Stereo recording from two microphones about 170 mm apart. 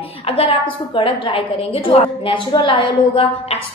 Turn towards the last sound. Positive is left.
turn(degrees=30)  # may be behind; listen again after turning